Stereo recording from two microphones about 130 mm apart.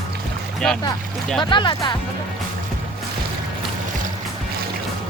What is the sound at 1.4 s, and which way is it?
Speech, 40° left (ahead or behind).